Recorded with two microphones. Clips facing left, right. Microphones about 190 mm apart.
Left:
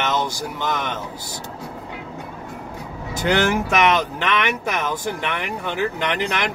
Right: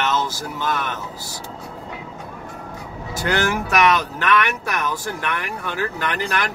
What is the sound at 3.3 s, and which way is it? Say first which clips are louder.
Speech: left 2 dB; 20° left (ahead or behind).